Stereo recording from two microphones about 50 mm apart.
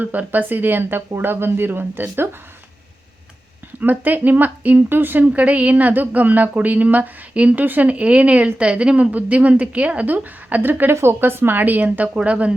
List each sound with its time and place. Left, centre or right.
0.0 s speech: right
3.8 s a woman's voice: right
5.2 s a woman's voice: right
10.7 s speech: right